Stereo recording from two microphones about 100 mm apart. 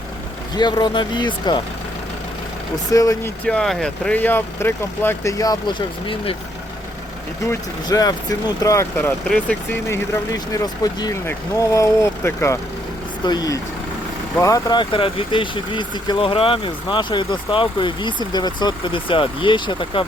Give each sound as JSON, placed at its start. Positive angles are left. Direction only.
{"t": 0.5, "sound": "speech", "side_deg": 45}
{"t": 2.9, "sound": "speech", "side_deg": 35}
{"t": 3.4, "sound": "speech", "side_deg": 5}
{"t": 5.4, "sound": "speech", "side_deg": 40}
{"t": 7.9, "sound": "speech", "side_deg": 40}
{"t": 10.3, "sound": "speech", "side_deg": 40}
{"t": 13.2, "sound": "speech", "side_deg": 40}
{"t": 14.8, "sound": "speech", "side_deg": 60}